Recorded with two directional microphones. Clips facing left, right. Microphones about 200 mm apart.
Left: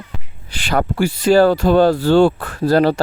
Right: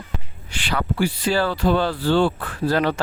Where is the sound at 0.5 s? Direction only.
45° left (ahead or behind).